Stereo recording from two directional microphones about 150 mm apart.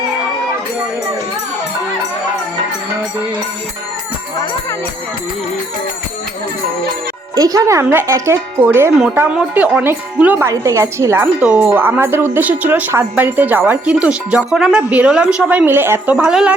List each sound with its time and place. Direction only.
7.3 s speech: 25° right (ahead or behind); by 16.6 s 5° right (ahead or behind)